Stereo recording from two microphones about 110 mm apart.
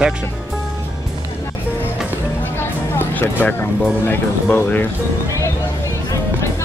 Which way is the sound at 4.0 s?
20° left (ahead or behind).